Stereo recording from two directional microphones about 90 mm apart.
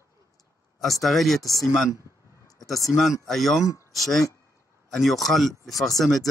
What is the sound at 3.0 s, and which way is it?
Speech, centre (ahead or behind).